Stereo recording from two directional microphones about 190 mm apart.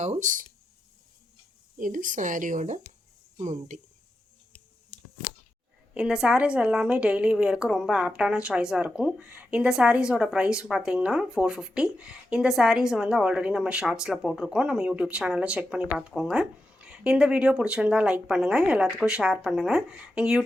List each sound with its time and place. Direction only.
0.0 s speech: 40° right (ahead or behind)
1.8 s speech: 45° right (ahead or behind)
5.9 s a woman's voice: 5° right (ahead or behind)